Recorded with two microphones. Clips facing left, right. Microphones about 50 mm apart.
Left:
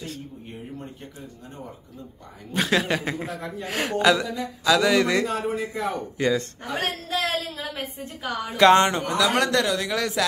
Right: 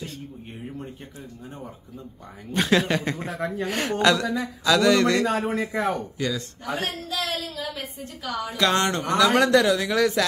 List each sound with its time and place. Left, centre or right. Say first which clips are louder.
2.5 s speech: right 1 dB; centre
5.2 s a man's voice: right 2 dB; right
5.6 s a man's voice: right 3 dB; right
6.1 s a woman's voice: left 5 dB; left
8.8 s speech: left 1 dB; centre
9.1 s speech: right 7 dB; centre